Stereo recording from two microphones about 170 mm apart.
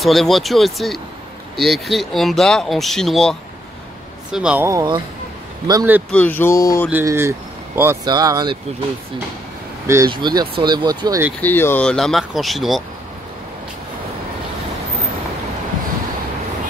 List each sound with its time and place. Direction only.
0.0 s speech: centre (ahead or behind)
4.6 s speech: 25° right (ahead or behind)
6.1 s speech: 10° left (ahead or behind)
6.9 s speech: 15° right (ahead or behind)
10.0 s speech: 25° right (ahead or behind)
11.4 s speech: 10° left (ahead or behind)